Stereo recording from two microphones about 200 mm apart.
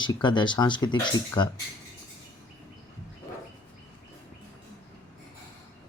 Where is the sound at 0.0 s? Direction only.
20° left (ahead or behind).